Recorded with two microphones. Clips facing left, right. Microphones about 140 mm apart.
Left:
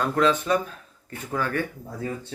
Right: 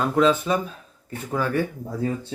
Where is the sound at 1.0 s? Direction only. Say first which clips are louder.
Right 3 dB; 10° right (ahead or behind).